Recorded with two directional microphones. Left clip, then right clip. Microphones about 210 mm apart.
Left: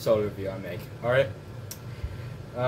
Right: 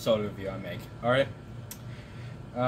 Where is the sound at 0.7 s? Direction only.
Centre (ahead or behind).